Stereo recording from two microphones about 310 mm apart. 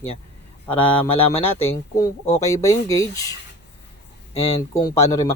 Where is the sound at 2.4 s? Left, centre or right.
Centre.